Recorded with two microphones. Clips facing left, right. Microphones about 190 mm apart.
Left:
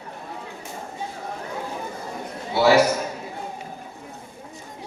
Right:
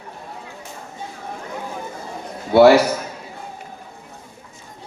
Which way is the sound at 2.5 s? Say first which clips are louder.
Right 6 dB; 60° right (ahead or behind).